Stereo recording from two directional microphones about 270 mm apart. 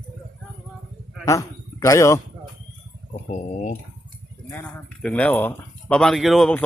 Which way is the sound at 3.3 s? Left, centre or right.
Left.